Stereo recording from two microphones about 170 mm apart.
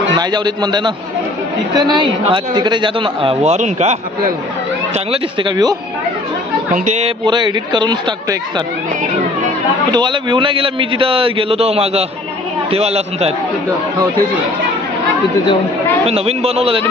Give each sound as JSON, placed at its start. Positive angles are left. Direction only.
{"t": 0.2, "sound": "a man's voice", "side_deg": -25}
{"t": 4.9, "sound": "a man's voice", "side_deg": -30}
{"t": 6.7, "sound": "speech", "side_deg": -45}
{"t": 7.2, "sound": "a man's voice", "side_deg": -25}
{"t": 9.8, "sound": "a man's voice", "side_deg": -25}
{"t": 16.1, "sound": "a man's voice", "side_deg": -35}